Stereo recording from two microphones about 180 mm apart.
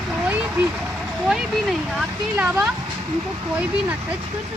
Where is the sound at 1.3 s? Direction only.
Centre (ahead or behind).